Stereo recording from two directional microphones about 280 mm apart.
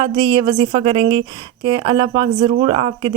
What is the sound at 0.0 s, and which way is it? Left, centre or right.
Speech, centre.